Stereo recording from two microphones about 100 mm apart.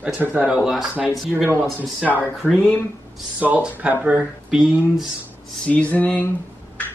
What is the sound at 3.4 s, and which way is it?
Speech, 15° right (ahead or behind).